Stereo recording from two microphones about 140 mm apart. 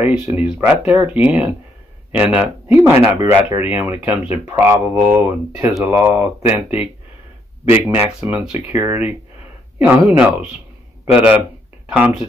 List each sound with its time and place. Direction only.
0.2 s speech: 15° right (ahead or behind)